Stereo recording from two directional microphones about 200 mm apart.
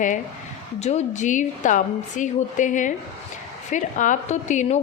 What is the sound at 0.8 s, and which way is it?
A woman's voice, 35° left (ahead or behind).